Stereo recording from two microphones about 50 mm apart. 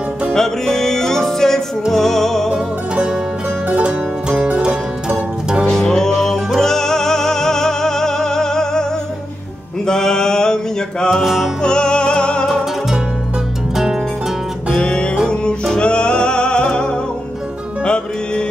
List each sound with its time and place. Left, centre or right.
0.3 s music: centre
2.5 s music: centre
3.6 s music: right
4.6 s music: centre
5.7 s music: centre
9.8 s mantra: centre
11.2 s music: centre
11.6 s music: centre
13.7 s music: centre
14.8 s music: centre